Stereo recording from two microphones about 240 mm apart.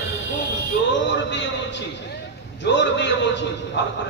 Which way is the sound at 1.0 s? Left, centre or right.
Left.